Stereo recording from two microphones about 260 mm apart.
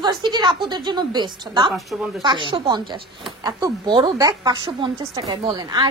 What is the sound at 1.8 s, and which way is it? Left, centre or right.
Speech, centre.